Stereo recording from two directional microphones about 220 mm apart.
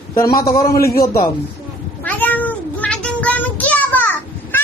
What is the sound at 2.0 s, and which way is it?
Meow, 5° left (ahead or behind).